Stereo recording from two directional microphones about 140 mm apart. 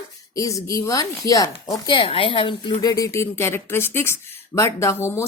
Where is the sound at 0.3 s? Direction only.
25° left (ahead or behind).